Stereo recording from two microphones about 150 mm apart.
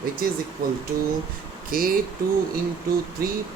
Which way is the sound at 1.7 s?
70° right (ahead or behind).